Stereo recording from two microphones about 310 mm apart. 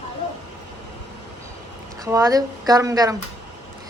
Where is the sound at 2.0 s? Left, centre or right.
Centre.